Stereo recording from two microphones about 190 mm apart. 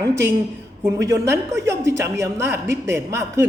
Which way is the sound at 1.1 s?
15° right (ahead or behind).